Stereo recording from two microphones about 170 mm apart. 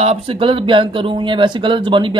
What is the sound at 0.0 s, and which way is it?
Speech, 35° right (ahead or behind).